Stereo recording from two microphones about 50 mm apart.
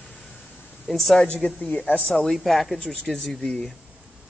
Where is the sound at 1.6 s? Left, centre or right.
Left.